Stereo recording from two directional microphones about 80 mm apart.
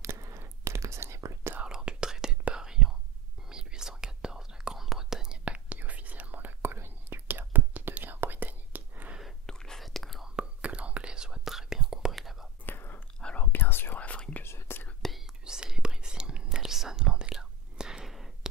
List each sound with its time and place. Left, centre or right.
0.0 s whispering: right
1.5 s whispering: centre
9.5 s whispering: centre
10.3 s whispering: centre
12.6 s whispering: left
13.2 s whispering: centre
13.5 s whispering: left
14.4 s whispering: left
15.0 s whispering: centre
15.4 s whispering: centre